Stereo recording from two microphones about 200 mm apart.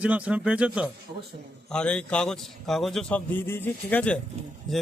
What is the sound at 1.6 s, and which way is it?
Speech, 5° left (ahead or behind).